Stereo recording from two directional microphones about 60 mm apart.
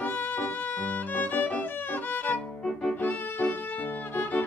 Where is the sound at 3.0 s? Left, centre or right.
Left.